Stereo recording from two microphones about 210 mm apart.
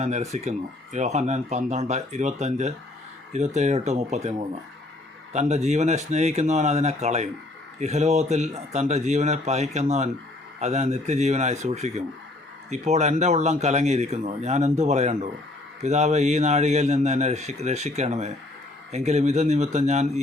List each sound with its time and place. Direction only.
0.0 s speech: 35° right (ahead or behind)